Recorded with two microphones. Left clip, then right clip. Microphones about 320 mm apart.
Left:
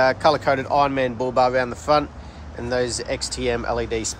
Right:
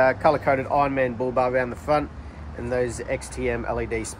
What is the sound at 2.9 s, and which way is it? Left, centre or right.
Speech, left.